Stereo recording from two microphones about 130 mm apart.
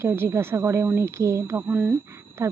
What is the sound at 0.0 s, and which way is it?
Speech, 20° right (ahead or behind).